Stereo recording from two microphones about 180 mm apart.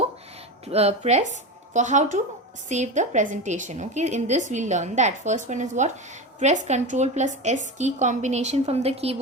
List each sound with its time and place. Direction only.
0.6 s a woman's voice: 35° right (ahead or behind)